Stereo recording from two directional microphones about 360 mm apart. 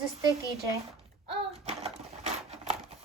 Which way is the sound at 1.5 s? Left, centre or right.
Centre.